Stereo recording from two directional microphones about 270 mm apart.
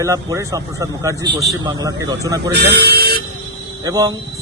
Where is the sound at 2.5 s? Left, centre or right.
Right.